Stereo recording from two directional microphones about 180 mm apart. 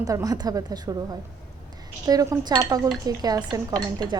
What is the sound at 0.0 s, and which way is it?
Speech, 20° right (ahead or behind).